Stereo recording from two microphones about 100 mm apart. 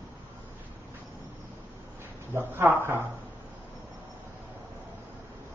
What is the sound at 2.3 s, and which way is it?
Speech, 25° right (ahead or behind).